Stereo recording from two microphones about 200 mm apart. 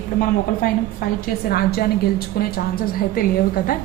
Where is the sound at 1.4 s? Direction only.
50° left (ahead or behind).